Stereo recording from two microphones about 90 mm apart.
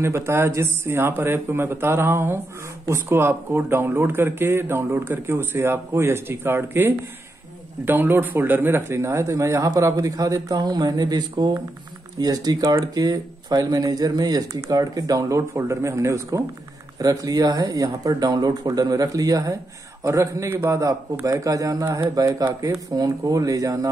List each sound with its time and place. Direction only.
0.0 s speech: 30° right (ahead or behind)